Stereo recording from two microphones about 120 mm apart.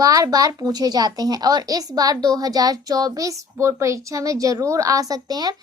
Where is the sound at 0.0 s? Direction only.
30° right (ahead or behind).